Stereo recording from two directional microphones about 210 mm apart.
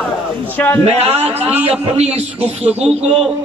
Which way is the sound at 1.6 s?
30° right (ahead or behind).